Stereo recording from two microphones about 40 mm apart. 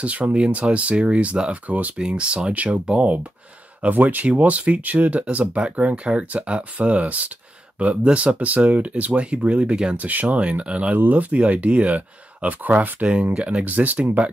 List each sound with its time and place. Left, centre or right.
0.0 s speech: right
2.0 s speech: right
3.9 s speech: right
4.3 s speech: right
11.0 s speech: right
11.3 s speech: right
13.0 s speech: right
13.7 s speech: right